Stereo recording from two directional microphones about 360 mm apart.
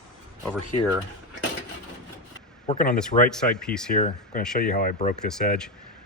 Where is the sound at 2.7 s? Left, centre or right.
Left.